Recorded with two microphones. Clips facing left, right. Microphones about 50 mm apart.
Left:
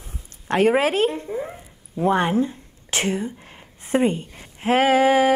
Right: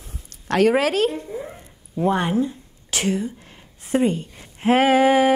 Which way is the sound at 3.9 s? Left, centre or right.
Left.